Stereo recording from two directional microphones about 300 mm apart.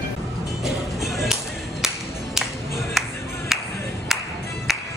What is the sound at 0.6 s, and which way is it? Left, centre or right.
Whip, centre.